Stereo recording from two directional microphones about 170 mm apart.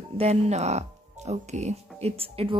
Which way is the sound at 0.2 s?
40° right (ahead or behind).